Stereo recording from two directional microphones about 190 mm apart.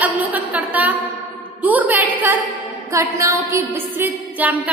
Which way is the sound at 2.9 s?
15° right (ahead or behind).